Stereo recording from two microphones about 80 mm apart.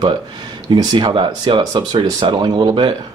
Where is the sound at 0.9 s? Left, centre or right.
Right.